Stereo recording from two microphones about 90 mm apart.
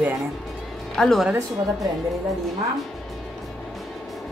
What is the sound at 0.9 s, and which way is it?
Speech, 5° left (ahead or behind).